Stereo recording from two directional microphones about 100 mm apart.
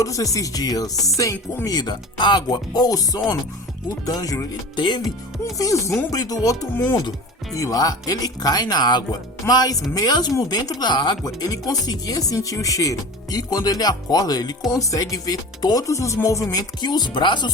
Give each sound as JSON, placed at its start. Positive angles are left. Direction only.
{"t": 0.0, "sound": "speech", "side_deg": 35}
{"t": 1.7, "sound": "speech", "side_deg": 50}
{"t": 4.8, "sound": "speech", "side_deg": 50}
{"t": 5.5, "sound": "speech", "side_deg": 35}